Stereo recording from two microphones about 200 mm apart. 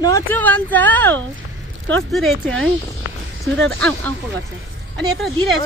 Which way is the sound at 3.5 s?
5° left (ahead or behind).